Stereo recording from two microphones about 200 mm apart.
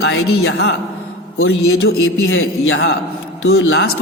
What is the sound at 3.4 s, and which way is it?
Speech, 70° left (ahead or behind).